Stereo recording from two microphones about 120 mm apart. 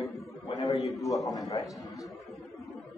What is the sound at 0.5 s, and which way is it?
Speech, 30° left (ahead or behind).